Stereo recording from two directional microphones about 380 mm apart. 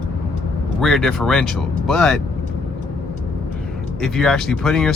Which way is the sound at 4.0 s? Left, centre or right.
Centre.